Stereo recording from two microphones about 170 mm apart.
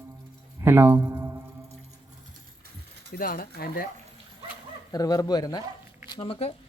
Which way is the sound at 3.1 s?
55° left (ahead or behind).